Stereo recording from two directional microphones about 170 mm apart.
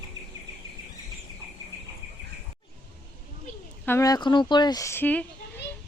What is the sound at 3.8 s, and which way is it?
A child's voice, 20° left (ahead or behind).